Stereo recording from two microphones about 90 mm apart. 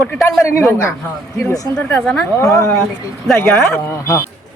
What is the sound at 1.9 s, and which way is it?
Speech, 10° left (ahead or behind).